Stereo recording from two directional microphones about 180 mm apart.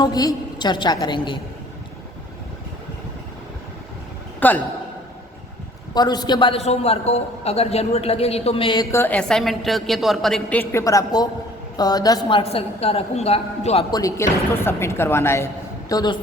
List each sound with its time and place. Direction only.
0.0 s a woman's voice: 20° left (ahead or behind)
4.4 s a man's voice: 10° left (ahead or behind)
5.9 s a man's voice: 20° left (ahead or behind)
12.4 s a woman's voice: 35° left (ahead or behind)
13.9 s a woman's voice: 15° left (ahead or behind)